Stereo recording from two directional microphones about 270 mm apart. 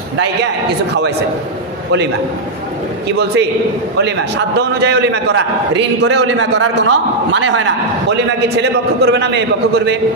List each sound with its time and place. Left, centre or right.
3.1 s a man's voice: right
8.4 s a man's voice: right